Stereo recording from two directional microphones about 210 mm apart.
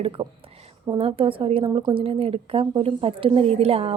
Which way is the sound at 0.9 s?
25° right (ahead or behind).